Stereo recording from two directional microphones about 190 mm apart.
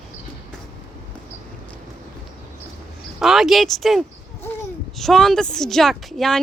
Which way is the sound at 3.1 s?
Centre (ahead or behind).